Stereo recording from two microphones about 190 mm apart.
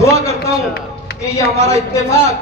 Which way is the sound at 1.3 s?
15° left (ahead or behind).